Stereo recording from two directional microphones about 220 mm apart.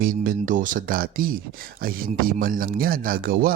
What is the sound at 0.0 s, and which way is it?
A man's voice, 40° right (ahead or behind).